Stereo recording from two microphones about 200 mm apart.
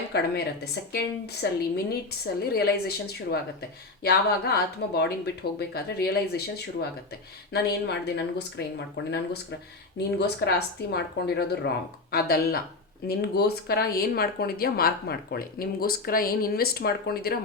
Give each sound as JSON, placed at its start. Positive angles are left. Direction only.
{"t": 0.1, "sound": "speech", "side_deg": 55}
{"t": 10.2, "sound": "speech", "side_deg": 55}